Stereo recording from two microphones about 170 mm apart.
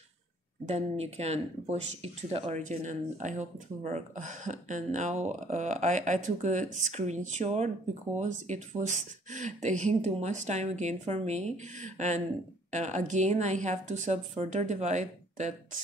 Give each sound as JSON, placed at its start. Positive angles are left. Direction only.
{"t": 0.7, "sound": "speech", "side_deg": -40}